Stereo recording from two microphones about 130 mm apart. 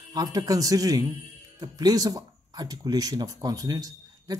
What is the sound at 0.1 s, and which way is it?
Speech, 30° right (ahead or behind).